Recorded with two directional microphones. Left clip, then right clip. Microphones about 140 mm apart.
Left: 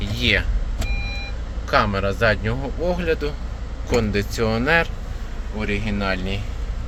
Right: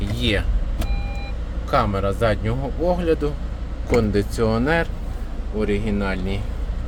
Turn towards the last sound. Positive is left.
turn(degrees=-10)  # may be behind; listen again after turning